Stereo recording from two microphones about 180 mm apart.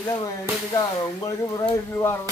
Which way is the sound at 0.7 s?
15° left (ahead or behind).